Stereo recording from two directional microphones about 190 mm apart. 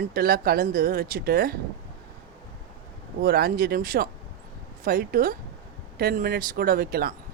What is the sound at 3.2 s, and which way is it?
Speech, 50° right (ahead or behind).